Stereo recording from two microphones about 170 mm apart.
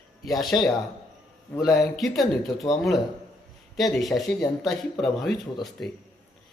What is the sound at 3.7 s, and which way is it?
Speech, centre (ahead or behind).